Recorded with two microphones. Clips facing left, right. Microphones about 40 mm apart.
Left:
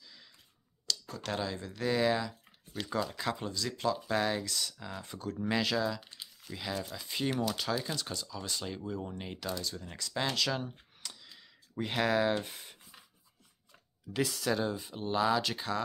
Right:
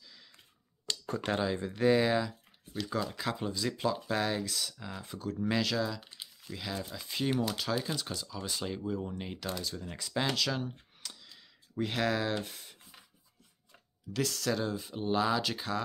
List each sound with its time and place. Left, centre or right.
0.8 s a sound: right
1.2 s speech: centre
14.1 s speech: centre